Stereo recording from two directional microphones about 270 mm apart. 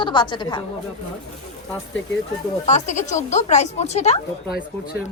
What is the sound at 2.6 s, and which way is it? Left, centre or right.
A woman's voice, left.